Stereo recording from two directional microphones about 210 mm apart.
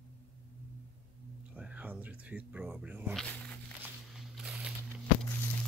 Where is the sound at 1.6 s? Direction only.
5° right (ahead or behind).